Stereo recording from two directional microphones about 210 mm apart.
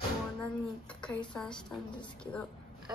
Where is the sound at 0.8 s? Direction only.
5° left (ahead or behind).